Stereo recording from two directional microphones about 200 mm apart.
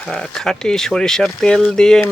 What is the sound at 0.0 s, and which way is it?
Speech, 5° left (ahead or behind).